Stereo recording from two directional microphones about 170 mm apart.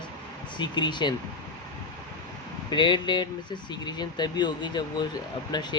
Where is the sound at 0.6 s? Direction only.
25° left (ahead or behind).